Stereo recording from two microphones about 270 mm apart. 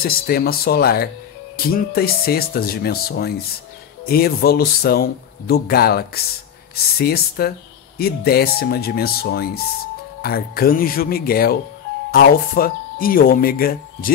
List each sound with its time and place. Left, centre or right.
0.0 s speech: left